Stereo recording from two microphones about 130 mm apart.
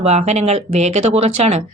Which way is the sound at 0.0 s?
55° right (ahead or behind).